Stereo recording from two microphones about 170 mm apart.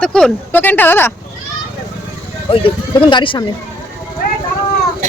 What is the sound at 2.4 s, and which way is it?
Speech, 30° left (ahead or behind).